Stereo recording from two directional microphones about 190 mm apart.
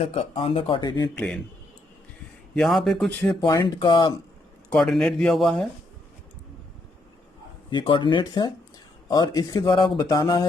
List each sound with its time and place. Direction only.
0.0 s speech: 30° left (ahead or behind)
1.1 s speech: 5° left (ahead or behind)
2.6 s speech: centre (ahead or behind)
3.4 s speech: 25° left (ahead or behind)
4.7 s speech: centre (ahead or behind)
7.7 s speech: 25° left (ahead or behind)